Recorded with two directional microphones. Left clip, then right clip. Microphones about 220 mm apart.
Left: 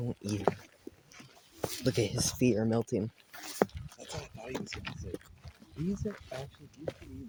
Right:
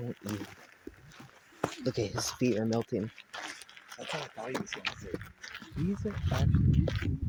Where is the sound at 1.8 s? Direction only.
40° left (ahead or behind).